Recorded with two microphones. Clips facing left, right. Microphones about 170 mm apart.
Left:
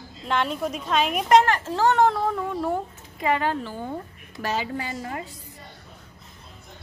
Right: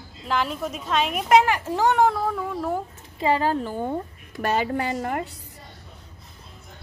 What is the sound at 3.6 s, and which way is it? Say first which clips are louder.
A woman's voice: right 5 dB; 50° right (ahead or behind).